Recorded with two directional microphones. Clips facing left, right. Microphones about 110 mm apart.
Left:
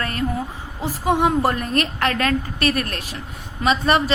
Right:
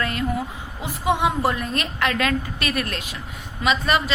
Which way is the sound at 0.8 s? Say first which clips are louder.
Left 2 dB; 40° left (ahead or behind).